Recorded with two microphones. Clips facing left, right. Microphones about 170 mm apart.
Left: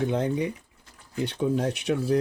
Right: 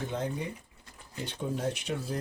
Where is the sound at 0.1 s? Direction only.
70° left (ahead or behind).